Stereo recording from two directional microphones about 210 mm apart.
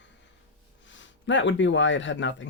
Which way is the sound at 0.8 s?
60° left (ahead or behind).